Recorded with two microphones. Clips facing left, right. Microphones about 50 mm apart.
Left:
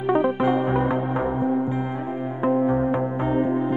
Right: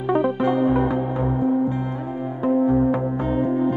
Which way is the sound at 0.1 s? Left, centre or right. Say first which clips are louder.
Even; centre.